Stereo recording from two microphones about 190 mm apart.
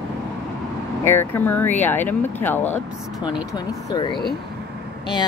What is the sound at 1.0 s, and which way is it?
Speech, 10° left (ahead or behind).